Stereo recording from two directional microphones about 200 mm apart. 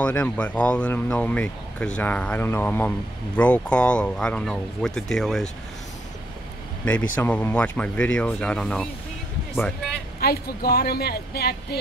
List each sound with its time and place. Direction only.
0.0 s speech: 5° left (ahead or behind)
7.2 s speech: 10° left (ahead or behind)
10.2 s speech: 50° left (ahead or behind)